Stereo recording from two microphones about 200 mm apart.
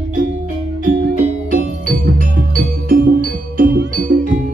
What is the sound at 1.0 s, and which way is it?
Music, 45° right (ahead or behind).